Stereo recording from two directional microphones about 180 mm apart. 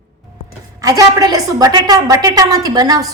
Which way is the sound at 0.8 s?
20° right (ahead or behind).